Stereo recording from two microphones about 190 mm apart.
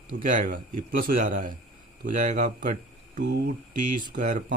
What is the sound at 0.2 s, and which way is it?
Speech, 45° right (ahead or behind).